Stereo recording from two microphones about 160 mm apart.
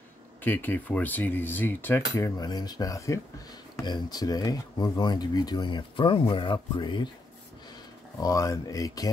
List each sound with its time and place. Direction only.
0.4 s speech: 10° left (ahead or behind); by 7.1 s 30° left (ahead or behind)
8.2 s speech: 20° left (ahead or behind)